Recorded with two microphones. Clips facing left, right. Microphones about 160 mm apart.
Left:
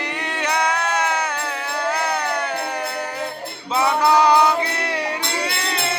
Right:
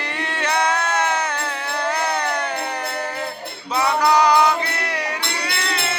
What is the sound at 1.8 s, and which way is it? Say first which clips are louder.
Music: even; 10° left (ahead or behind).